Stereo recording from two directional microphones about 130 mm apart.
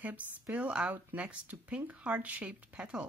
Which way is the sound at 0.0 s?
10° right (ahead or behind).